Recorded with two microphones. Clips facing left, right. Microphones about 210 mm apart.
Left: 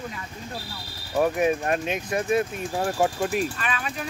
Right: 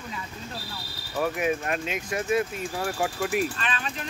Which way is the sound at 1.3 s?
30° left (ahead or behind).